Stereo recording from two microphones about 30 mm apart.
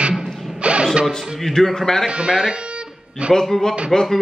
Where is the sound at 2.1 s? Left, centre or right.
Right.